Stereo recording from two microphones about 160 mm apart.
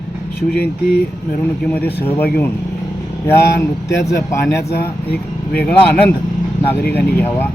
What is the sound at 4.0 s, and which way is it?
Speech, 90° left.